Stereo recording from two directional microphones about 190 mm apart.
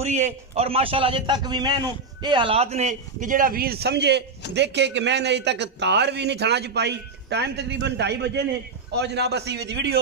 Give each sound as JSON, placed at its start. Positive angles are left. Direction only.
{"t": 0.0, "sound": "a man's voice", "side_deg": -35}